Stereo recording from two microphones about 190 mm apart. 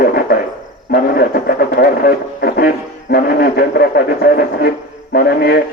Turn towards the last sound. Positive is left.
turn(degrees=55)  # may be behind; listen again after turning